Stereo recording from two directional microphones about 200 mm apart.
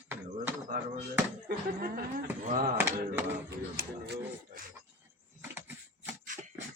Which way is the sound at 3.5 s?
50° right (ahead or behind).